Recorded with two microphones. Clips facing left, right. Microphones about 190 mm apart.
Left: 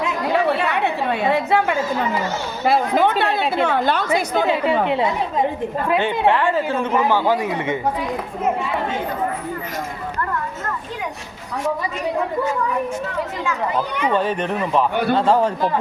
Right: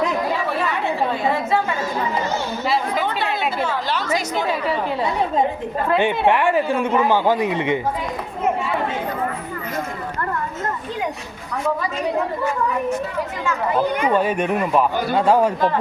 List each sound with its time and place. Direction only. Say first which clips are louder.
0.3 s chatter: left 4 dB; 70° left (ahead or behind)
2.6 s a woman's voice: left 6 dB; 55° left (ahead or behind)
4.6 s speech: left 4 dB; 25° left (ahead or behind)
6.0 s a woman's voice: right 1 dB; 15° right (ahead or behind)
14.1 s a woman's voice: right 2 dB; 10° right (ahead or behind)